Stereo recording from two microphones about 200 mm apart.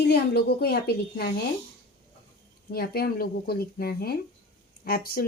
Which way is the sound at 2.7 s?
50° left (ahead or behind).